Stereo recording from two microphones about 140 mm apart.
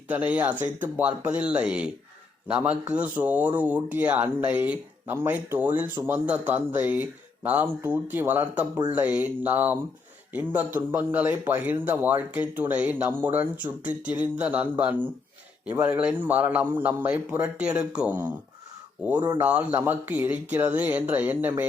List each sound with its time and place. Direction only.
0.1 s speech: 10° right (ahead or behind)
19.2 s speech: 20° right (ahead or behind)
19.5 s speech: 10° right (ahead or behind)